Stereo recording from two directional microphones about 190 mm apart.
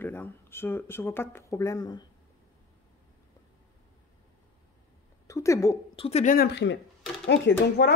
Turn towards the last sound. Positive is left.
turn(degrees=65)  # may be behind; listen again after turning